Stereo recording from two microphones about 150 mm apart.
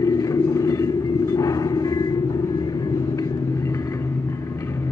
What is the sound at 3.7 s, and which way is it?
Vehicle, 20° left (ahead or behind).